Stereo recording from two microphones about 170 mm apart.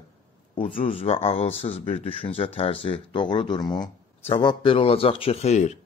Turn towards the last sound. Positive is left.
turn(degrees=40)  # may be behind; listen again after turning